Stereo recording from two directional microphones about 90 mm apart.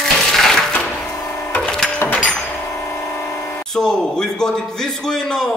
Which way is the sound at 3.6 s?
5° left (ahead or behind).